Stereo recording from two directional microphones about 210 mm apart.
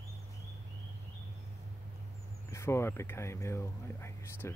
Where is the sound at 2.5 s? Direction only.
10° left (ahead or behind).